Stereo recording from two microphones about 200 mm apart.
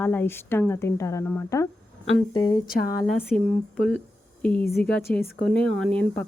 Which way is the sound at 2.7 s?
50° left (ahead or behind).